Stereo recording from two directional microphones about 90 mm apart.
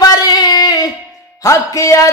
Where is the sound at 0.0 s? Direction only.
50° left (ahead or behind).